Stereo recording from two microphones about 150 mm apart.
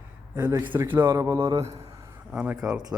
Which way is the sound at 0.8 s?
15° right (ahead or behind).